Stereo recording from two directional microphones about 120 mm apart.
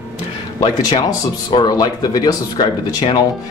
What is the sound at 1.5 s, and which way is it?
Speech, 35° left (ahead or behind).